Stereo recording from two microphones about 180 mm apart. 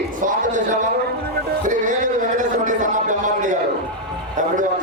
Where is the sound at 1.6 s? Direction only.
45° right (ahead or behind).